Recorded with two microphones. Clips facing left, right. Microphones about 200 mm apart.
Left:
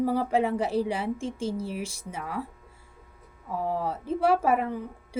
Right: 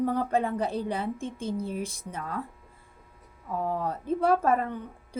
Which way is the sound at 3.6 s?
5° left (ahead or behind).